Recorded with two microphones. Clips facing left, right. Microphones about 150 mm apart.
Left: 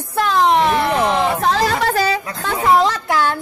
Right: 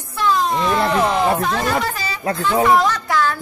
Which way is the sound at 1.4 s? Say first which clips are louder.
Left 2 dB; 85° left.